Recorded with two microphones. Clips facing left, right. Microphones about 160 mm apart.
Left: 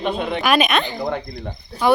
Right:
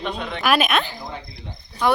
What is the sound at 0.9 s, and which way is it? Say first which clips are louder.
Speech: left 10 dB; 65° left (ahead or behind).